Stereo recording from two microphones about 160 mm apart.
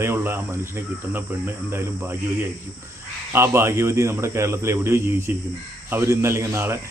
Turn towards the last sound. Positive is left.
turn(degrees=-15)  # may be behind; listen again after turning